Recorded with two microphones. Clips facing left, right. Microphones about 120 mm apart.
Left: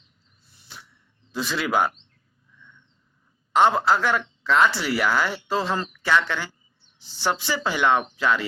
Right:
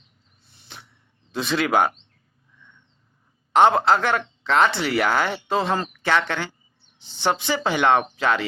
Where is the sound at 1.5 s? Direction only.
55° right (ahead or behind).